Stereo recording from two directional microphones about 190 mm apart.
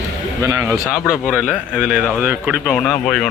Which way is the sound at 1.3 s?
5° right (ahead or behind).